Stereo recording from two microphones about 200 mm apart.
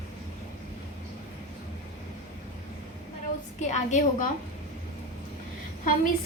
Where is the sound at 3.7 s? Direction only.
35° left (ahead or behind).